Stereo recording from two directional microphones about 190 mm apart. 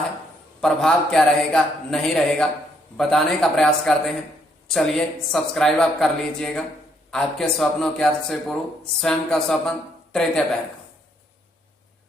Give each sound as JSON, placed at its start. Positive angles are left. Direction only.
{"t": 0.6, "sound": "a man's voice", "side_deg": 0}